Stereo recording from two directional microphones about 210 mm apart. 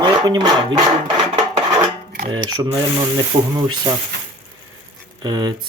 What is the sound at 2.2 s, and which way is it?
Speech, 20° right (ahead or behind).